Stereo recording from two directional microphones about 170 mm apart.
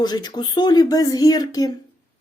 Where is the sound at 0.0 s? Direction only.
25° left (ahead or behind).